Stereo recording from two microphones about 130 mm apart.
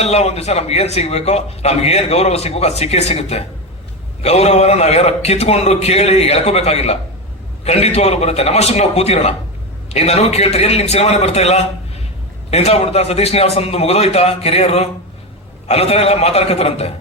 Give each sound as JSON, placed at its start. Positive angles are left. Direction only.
{"t": 0.0, "sound": "a man's voice", "side_deg": 55}